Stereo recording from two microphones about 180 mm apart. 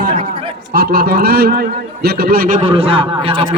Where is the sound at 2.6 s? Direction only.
30° right (ahead or behind).